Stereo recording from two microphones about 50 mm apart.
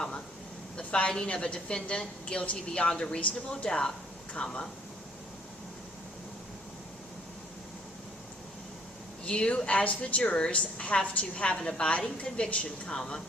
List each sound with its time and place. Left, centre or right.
0.8 s a sound: left
1.1 s a woman's voice: left
9.2 s a woman's voice: left
13.0 s speech: centre